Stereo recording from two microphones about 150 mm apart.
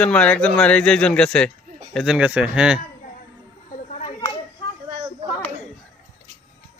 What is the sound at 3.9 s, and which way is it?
Children playing, 45° left (ahead or behind).